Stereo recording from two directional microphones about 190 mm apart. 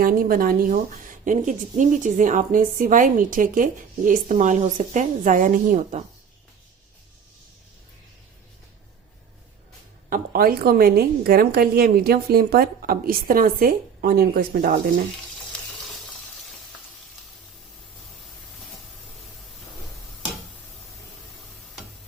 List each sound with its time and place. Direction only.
0.0 s a woman's voice: 50° right (ahead or behind)
10.1 s a woman's voice: 50° right (ahead or behind)